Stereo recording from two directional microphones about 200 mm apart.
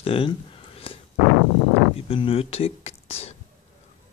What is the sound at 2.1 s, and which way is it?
Speech, 30° left (ahead or behind).